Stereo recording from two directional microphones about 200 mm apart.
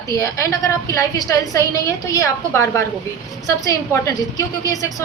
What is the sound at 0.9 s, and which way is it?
A woman's voice, 15° left (ahead or behind).